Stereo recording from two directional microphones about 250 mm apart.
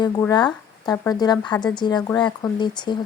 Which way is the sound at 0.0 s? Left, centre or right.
Centre.